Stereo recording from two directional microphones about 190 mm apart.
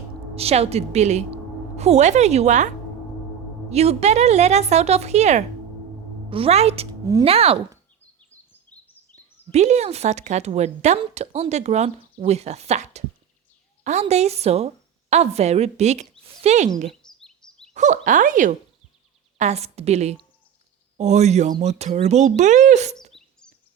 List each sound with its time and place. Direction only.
0.3 s a woman's voice: 30° right (ahead or behind)
9.5 s a woman's voice: 35° right (ahead or behind)
17.0 s chirp: 5° left (ahead or behind)
17.7 s a woman's voice: 40° right (ahead or behind)